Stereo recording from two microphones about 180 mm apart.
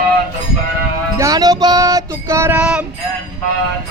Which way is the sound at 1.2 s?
20° right (ahead or behind).